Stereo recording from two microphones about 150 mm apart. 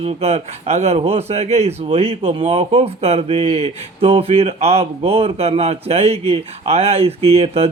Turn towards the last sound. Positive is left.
turn(degrees=-45)  # may be behind; listen again after turning